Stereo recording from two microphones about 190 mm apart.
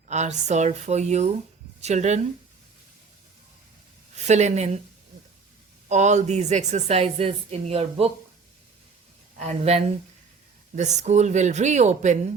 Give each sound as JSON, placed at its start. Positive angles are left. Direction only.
{"t": 0.1, "sound": "speech", "side_deg": -35}
{"t": 4.1, "sound": "speech", "side_deg": -35}
{"t": 5.9, "sound": "speech", "side_deg": -40}
{"t": 9.4, "sound": "speech", "side_deg": -35}